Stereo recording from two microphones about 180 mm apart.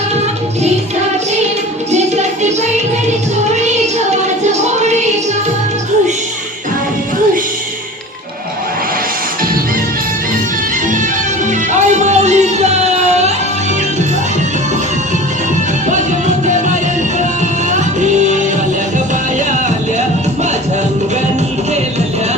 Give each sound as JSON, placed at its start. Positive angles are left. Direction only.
{"t": 1.9, "sound": "music", "side_deg": -40}
{"t": 4.1, "sound": "a sound", "side_deg": -40}
{"t": 11.7, "sound": "music", "side_deg": -40}
{"t": 15.9, "sound": "music", "side_deg": -40}